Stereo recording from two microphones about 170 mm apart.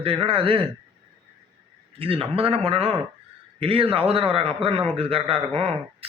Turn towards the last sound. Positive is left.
turn(degrees=-35)  # may be behind; listen again after turning